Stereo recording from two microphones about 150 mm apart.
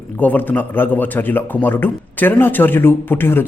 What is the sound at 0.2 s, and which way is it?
A man's voice, 10° left (ahead or behind).